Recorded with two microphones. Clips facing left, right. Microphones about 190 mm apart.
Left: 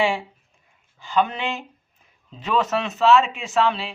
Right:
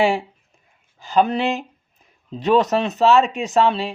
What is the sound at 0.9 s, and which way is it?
Speech, 40° right (ahead or behind).